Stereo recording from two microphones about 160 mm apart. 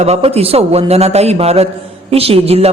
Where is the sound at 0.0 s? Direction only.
40° right (ahead or behind).